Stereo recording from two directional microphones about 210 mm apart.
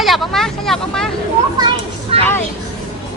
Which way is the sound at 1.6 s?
20° right (ahead or behind).